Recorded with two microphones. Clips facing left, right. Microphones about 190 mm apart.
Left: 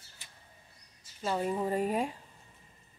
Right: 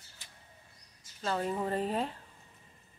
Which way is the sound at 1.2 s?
10° left (ahead or behind).